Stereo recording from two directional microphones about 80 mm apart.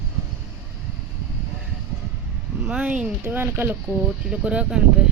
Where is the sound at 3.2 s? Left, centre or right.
Right.